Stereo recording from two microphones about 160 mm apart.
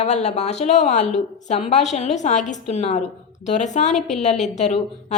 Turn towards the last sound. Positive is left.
turn(degrees=45)  # may be behind; listen again after turning